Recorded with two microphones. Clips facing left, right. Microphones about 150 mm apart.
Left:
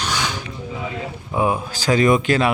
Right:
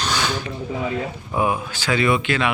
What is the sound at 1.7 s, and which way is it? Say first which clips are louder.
Speech: left 6 dB; 40° left (ahead or behind).